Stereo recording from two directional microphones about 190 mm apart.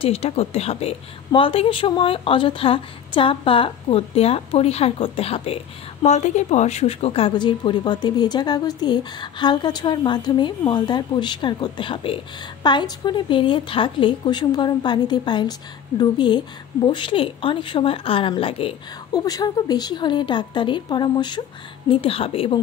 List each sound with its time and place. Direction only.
0.0 s speech: 30° left (ahead or behind)